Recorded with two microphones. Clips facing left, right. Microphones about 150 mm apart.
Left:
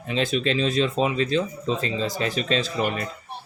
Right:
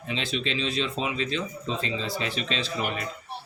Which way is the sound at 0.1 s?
45° left (ahead or behind).